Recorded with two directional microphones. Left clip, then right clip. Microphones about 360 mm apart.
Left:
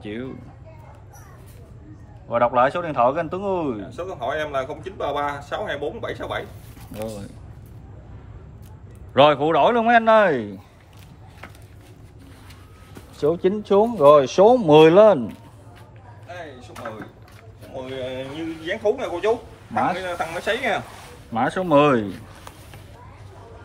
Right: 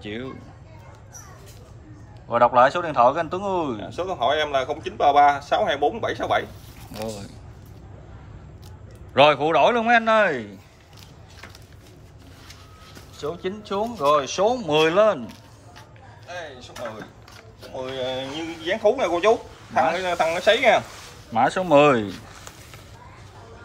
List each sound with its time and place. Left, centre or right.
0.0 s a man's voice: centre
2.2 s a man's voice: centre
3.9 s speech: centre
6.9 s a man's voice: centre
9.1 s a man's voice: centre
13.2 s speech: centre
17.7 s speech: centre
21.3 s a man's voice: centre